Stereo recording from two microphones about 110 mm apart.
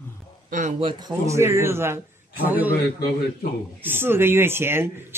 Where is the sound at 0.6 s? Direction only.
90° right.